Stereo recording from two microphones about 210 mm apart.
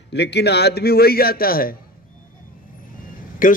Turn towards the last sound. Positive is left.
turn(degrees=40)  # may be behind; listen again after turning